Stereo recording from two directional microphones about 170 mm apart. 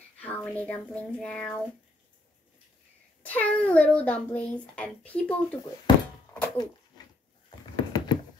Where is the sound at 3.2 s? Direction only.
10° left (ahead or behind).